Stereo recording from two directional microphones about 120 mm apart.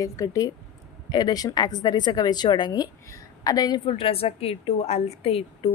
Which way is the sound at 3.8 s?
50° left (ahead or behind).